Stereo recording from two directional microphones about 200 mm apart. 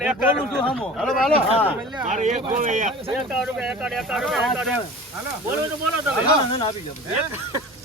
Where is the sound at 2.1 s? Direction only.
35° right (ahead or behind).